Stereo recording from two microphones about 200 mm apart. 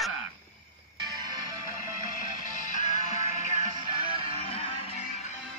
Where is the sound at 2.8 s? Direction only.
35° left (ahead or behind).